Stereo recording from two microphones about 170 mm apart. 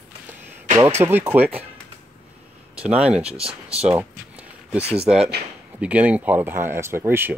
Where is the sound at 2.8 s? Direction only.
5° right (ahead or behind).